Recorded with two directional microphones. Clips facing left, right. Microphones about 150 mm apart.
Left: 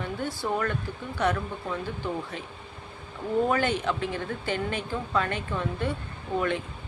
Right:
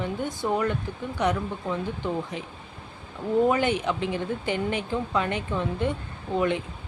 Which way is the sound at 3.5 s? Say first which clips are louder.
Right 2 dB; 15° right (ahead or behind).